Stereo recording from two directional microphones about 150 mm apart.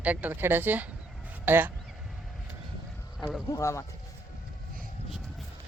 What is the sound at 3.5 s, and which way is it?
Speech, 20° left (ahead or behind).